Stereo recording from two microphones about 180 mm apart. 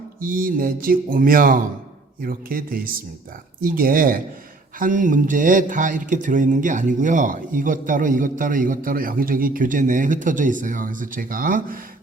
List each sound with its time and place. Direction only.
0.2 s speech: 50° right (ahead or behind)